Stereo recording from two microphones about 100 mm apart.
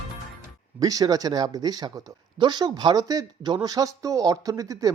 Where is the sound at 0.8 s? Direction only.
40° right (ahead or behind).